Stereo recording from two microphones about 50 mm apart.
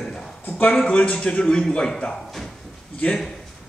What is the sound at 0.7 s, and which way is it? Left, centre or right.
A man's voice, left.